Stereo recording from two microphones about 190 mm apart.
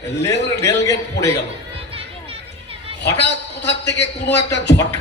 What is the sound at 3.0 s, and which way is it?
A man's voice, 65° left (ahead or behind).